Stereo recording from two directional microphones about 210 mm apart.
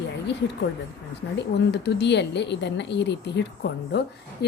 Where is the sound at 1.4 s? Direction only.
55° left (ahead or behind).